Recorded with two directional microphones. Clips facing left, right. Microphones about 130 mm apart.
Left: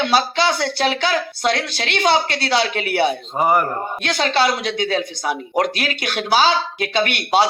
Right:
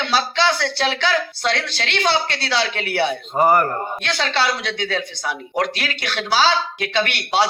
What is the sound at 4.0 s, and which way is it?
Speech, 45° left (ahead or behind).